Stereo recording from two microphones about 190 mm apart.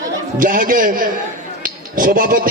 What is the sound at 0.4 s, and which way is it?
A man's voice, 45° right (ahead or behind).